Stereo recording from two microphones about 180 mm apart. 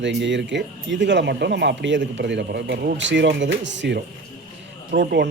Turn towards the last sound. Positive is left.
turn(degrees=-70)  # may be behind; listen again after turning